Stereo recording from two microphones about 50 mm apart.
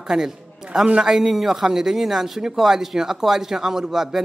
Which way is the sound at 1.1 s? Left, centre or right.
Centre.